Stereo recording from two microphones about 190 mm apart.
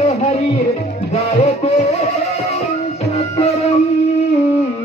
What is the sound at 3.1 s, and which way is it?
Music, 35° left (ahead or behind).